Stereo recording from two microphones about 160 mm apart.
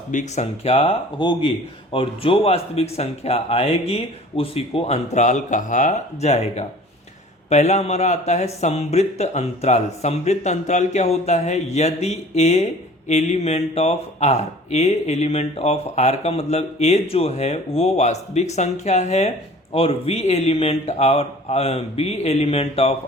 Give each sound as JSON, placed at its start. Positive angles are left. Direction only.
{"t": 0.1, "sound": "speech", "side_deg": 50}
{"t": 1.2, "sound": "speech", "side_deg": 30}